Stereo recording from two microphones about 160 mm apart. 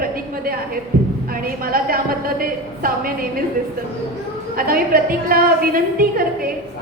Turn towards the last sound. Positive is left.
turn(degrees=-65)  # may be behind; listen again after turning